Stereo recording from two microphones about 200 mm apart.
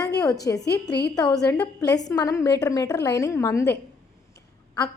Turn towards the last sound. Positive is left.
turn(degrees=20)  # may be behind; listen again after turning